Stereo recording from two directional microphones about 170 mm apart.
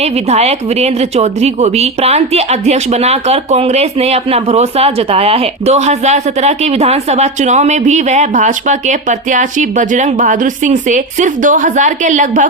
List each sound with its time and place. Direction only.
0.0 s a woman's voice: 40° right (ahead or behind)